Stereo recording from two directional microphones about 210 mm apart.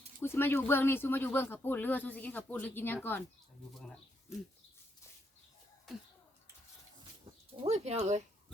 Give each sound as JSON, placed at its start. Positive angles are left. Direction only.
{"t": 0.2, "sound": "speech", "side_deg": 10}
{"t": 7.3, "sound": "bird", "side_deg": -25}
{"t": 7.6, "sound": "speech", "side_deg": -30}